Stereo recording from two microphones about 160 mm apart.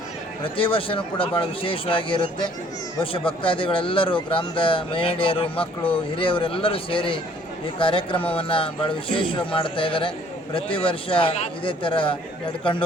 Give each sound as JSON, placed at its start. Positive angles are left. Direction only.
{"t": 0.4, "sound": "speech", "side_deg": 35}